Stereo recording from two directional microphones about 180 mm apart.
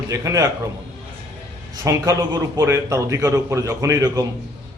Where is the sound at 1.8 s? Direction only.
15° right (ahead or behind).